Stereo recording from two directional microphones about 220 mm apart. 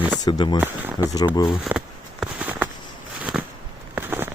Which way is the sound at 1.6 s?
5° right (ahead or behind).